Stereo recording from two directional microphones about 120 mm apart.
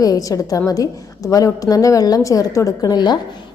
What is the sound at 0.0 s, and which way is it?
A woman's voice, 30° left (ahead or behind).